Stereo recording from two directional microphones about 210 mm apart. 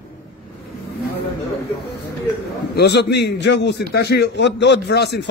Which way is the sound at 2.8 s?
55° left (ahead or behind).